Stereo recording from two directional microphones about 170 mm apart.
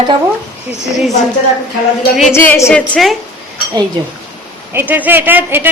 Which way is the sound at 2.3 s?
10° left (ahead or behind).